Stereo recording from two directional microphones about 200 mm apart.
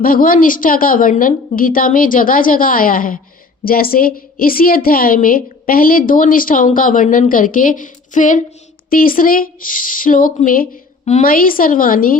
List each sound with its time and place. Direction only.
0.0 s a woman's voice: 45° left (ahead or behind)